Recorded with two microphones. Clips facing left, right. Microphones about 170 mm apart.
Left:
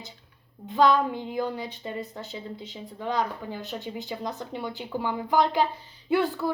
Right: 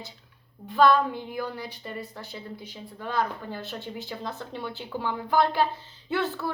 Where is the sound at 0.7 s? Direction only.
15° left (ahead or behind).